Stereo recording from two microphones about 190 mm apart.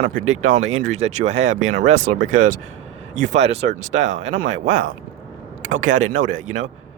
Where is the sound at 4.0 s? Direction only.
80° right.